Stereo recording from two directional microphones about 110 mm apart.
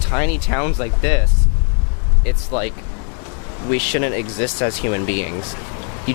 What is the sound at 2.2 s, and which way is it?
Speech, 15° left (ahead or behind).